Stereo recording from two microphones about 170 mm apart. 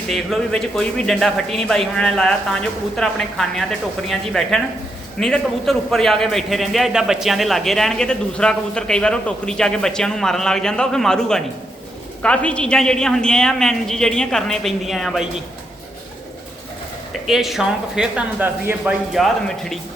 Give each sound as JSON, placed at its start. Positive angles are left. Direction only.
{"t": 0.1, "sound": "a man's voice", "side_deg": 0}
{"t": 17.2, "sound": "a man's voice", "side_deg": 0}
{"t": 19.1, "sound": "a man's voice", "side_deg": 0}